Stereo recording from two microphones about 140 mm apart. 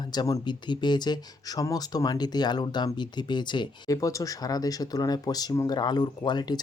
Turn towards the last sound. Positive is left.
turn(degrees=30)  # may be behind; listen again after turning